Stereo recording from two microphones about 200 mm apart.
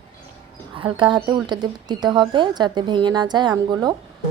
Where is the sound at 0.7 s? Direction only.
25° right (ahead or behind).